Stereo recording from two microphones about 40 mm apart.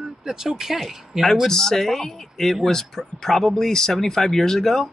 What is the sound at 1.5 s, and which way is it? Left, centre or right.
Speech, centre.